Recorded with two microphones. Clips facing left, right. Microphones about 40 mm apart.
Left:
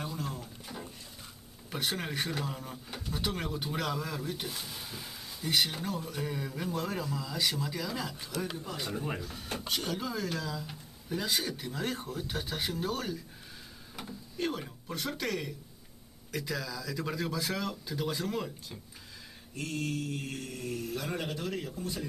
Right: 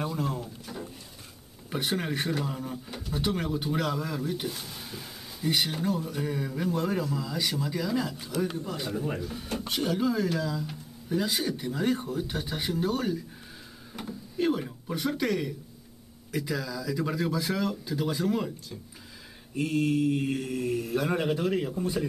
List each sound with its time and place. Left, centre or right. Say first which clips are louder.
0.0 s drawer open or close: right 7 dB; centre
0.7 s a sound: right 4 dB; centre
1.7 s speech: right 5 dB; centre
9.2 s speech: right 5 dB; centre
19.5 s speech: right 9 dB; centre